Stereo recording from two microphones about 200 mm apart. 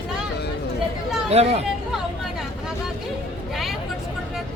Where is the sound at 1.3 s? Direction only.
30° right (ahead or behind).